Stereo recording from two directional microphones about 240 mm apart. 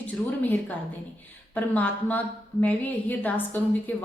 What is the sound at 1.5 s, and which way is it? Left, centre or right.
A woman's voice, centre.